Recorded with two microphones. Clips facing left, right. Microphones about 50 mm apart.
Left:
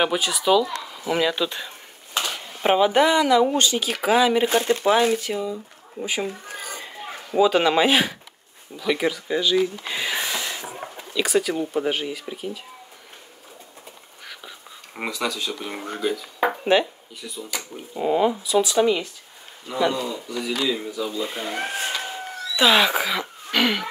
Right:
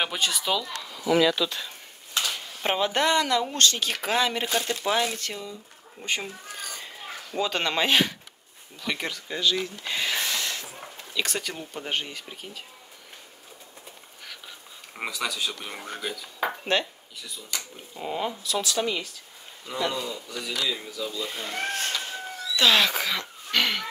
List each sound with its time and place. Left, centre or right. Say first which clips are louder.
0.0 s speech: left 6 dB; centre
0.7 s speech: right 1 dB; centre
2.1 s a sound: left 2 dB; left
2.6 s speech: left 7 dB; centre
4.5 s speech: left 7 dB; left
5.1 s speech: left 10 dB; centre
6.6 s a sound: left 3 dB; centre
8.7 s speech: left 8 dB; centre
11.1 s speech: left 9 dB; centre
14.2 s a sound: left 3 dB; centre
15.0 s speech: left 3 dB; centre